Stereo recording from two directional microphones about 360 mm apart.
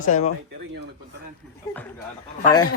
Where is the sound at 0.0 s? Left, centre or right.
Left.